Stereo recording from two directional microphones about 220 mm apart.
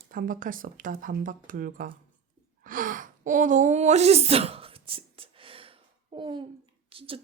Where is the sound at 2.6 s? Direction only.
40° right (ahead or behind); by 6.4 s 20° right (ahead or behind).